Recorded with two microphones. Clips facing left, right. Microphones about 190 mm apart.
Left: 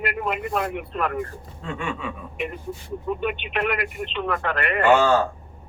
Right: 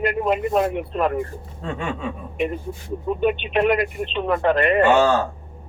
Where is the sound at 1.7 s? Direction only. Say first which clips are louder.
Right 2 dB; 35° right (ahead or behind).